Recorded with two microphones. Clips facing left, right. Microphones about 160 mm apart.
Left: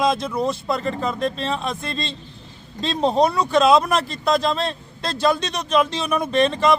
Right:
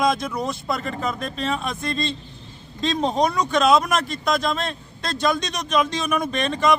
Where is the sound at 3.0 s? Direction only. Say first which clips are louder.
Left 4 dB; 30° left (ahead or behind).